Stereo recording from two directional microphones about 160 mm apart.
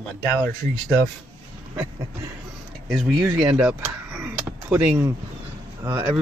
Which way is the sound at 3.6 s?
10° right (ahead or behind).